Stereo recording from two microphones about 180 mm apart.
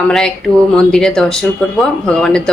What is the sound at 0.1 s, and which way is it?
Speech, 5° left (ahead or behind).